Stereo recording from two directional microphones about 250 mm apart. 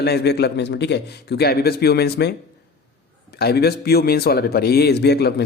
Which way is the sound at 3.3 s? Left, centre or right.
Left.